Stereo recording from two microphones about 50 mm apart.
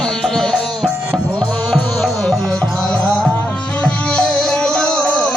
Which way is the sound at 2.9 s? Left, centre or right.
Left.